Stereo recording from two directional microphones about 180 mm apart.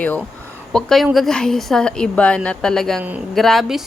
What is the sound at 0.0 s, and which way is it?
A woman's voice, 10° left (ahead or behind).